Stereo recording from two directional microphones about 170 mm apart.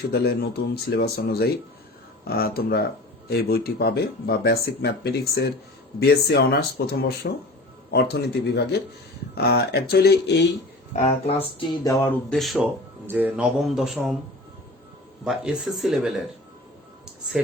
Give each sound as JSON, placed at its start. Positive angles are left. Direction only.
{"t": 0.1, "sound": "speech", "side_deg": 70}
{"t": 10.9, "sound": "speech", "side_deg": 40}
{"t": 11.4, "sound": "music", "side_deg": 25}
{"t": 12.3, "sound": "speech", "side_deg": 0}
{"t": 13.1, "sound": "speech", "side_deg": -10}
{"t": 15.2, "sound": "speech", "side_deg": -5}